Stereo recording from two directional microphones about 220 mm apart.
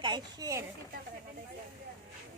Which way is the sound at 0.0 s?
20° right (ahead or behind).